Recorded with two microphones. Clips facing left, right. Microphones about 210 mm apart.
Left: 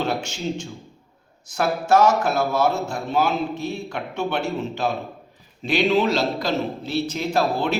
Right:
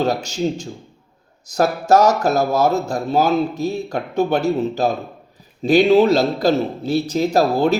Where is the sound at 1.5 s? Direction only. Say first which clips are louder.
Right 4 dB; 40° right (ahead or behind).